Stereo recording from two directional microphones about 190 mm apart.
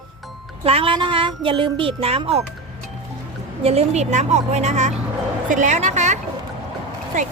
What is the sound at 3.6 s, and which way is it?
A woman's voice, 30° right (ahead or behind).